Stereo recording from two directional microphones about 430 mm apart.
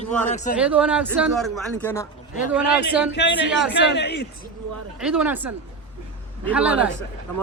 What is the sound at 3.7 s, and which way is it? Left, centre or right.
Speech, left.